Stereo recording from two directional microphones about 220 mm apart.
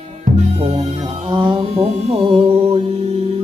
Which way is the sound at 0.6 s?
25° right (ahead or behind).